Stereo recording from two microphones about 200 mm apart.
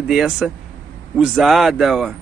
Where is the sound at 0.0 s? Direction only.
5° right (ahead or behind).